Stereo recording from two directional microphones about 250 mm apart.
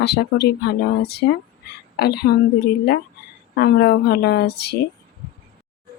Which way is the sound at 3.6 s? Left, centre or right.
Left.